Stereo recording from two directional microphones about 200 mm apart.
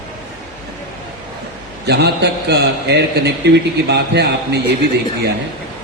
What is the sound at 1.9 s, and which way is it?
A man's voice, 55° right (ahead or behind).